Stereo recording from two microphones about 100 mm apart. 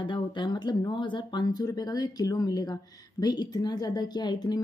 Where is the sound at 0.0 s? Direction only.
50° left (ahead or behind).